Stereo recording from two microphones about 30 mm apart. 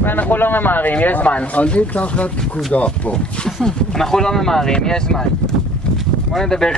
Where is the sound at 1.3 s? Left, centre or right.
Left.